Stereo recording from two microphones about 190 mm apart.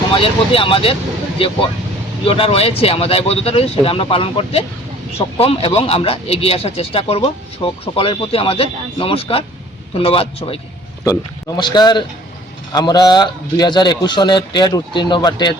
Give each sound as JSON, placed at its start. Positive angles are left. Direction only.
{"t": 0.1, "sound": "a man's voice", "side_deg": 30}
{"t": 2.2, "sound": "a man's voice", "side_deg": 30}
{"t": 11.0, "sound": "a man's voice", "side_deg": 20}